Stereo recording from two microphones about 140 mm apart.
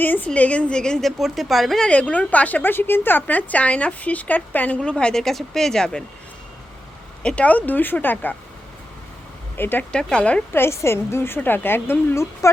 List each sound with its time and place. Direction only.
0.0 s a woman's voice: 15° left (ahead or behind)
7.2 s a woman's voice: 10° left (ahead or behind)
9.6 s a woman's voice: 15° left (ahead or behind)